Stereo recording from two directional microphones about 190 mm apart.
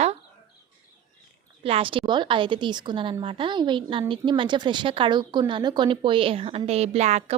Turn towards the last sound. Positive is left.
turn(degrees=-35)  # may be behind; listen again after turning